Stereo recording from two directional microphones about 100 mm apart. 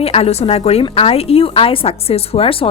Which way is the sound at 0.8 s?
75° left (ahead or behind).